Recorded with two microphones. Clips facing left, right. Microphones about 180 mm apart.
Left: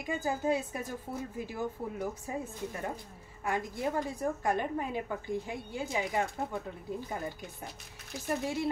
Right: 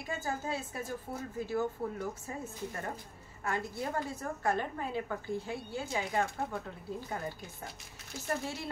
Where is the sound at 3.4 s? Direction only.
15° left (ahead or behind).